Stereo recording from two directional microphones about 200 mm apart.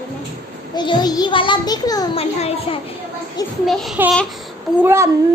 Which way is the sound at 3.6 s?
Centre (ahead or behind).